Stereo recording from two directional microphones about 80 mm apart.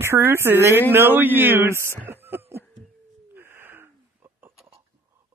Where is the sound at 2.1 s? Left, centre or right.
Right.